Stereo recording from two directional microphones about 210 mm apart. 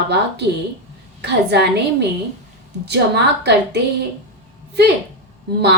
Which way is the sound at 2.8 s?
50° right (ahead or behind).